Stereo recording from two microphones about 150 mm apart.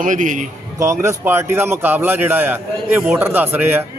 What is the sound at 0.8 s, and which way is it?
A man's voice, 20° right (ahead or behind).